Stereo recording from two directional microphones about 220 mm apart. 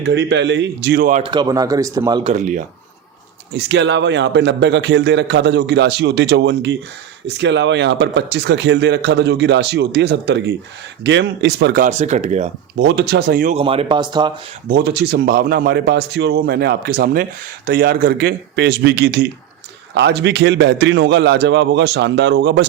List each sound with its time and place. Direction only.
0.0 s speech: 50° right (ahead or behind)
1.2 s speech: 20° right (ahead or behind)
2.3 s speech: 35° right (ahead or behind)
3.5 s speech: 50° right (ahead or behind); by 12.5 s 30° right (ahead or behind)
12.7 s speech: 50° right (ahead or behind)
13.6 s speech: 25° right (ahead or behind)
14.7 s speech: 45° right (ahead or behind)